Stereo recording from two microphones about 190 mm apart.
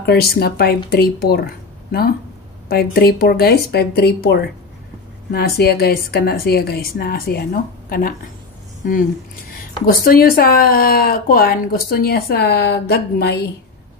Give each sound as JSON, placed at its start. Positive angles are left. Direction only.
{"t": 0.0, "sound": "speech", "side_deg": 55}